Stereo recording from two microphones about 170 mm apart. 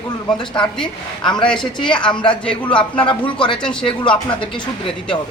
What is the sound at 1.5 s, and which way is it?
Speech, 30° left (ahead or behind).